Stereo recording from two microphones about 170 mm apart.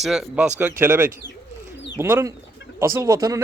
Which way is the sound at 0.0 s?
5° right (ahead or behind).